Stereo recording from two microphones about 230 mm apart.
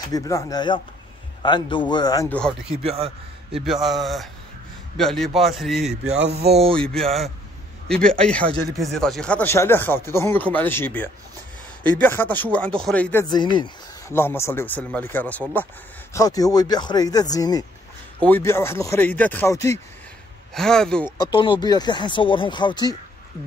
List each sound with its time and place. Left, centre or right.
0.1 s speech: centre
2.8 s a man's voice: right
3.5 s a man's voice: centre
21.2 s speech: left